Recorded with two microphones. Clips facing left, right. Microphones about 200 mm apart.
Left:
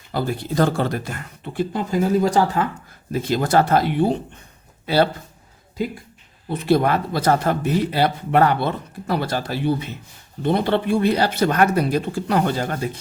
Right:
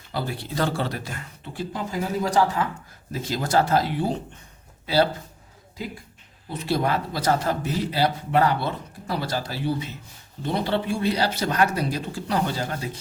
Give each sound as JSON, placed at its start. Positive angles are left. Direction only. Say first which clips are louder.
{"t": 0.1, "sound": "speech", "louder": "left 6 dB", "side_deg": 50}
{"t": 6.5, "sound": "speech", "louder": "left 6 dB", "side_deg": 60}